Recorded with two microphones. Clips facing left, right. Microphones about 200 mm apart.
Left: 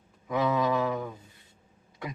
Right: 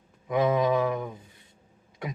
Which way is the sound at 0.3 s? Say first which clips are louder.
Right 3 dB; 20° right (ahead or behind).